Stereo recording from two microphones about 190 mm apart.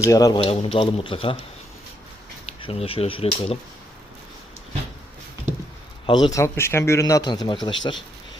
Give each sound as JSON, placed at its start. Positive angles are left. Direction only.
{"t": 0.0, "sound": "speech", "side_deg": 15}
{"t": 2.5, "sound": "speech", "side_deg": 30}
{"t": 6.1, "sound": "speech", "side_deg": 25}